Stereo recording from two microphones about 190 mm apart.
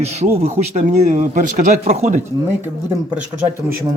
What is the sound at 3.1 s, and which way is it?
Speech, 10° right (ahead or behind).